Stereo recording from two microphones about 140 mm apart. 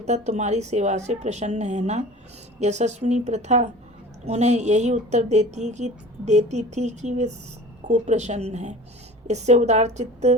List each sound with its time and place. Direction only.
0.0 s a woman's voice: 55° right (ahead or behind)